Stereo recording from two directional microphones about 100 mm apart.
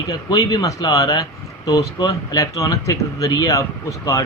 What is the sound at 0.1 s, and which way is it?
Speech, 40° left (ahead or behind).